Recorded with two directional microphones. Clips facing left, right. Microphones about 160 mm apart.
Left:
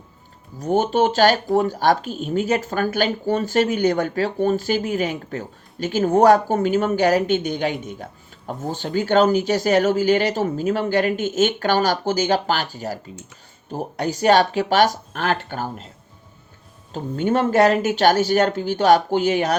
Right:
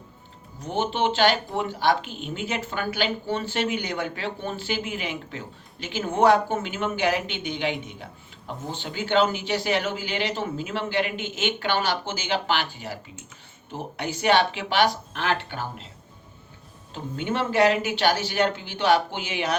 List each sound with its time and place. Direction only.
0.6 s speech: 45° left (ahead or behind)
16.9 s speech: 45° left (ahead or behind)